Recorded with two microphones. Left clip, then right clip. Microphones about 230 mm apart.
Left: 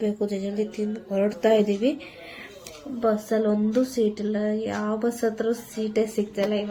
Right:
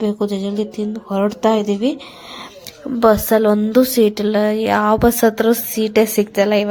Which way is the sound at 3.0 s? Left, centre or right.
Right.